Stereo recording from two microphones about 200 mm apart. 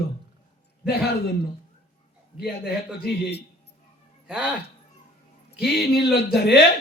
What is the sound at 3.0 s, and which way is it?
Speech, 55° left (ahead or behind).